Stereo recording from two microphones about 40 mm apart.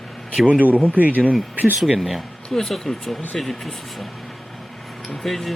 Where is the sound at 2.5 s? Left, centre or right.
Centre.